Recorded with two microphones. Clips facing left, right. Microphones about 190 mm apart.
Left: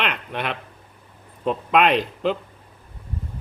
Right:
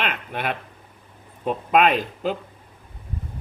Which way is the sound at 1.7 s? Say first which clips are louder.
Even; centre (ahead or behind).